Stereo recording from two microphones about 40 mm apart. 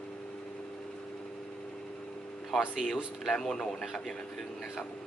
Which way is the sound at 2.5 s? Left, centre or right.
Centre.